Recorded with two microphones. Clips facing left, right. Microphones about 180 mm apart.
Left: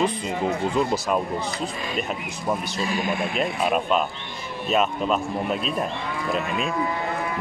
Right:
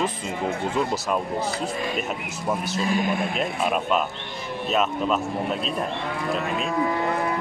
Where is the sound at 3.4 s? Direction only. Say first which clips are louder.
Left 1 dB; centre (ahead or behind).